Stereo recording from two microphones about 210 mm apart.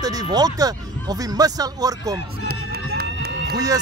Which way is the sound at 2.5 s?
50° right (ahead or behind).